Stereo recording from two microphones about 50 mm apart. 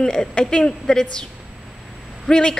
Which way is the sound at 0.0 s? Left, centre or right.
Centre.